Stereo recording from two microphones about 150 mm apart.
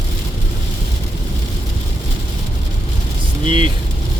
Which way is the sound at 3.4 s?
35° right (ahead or behind).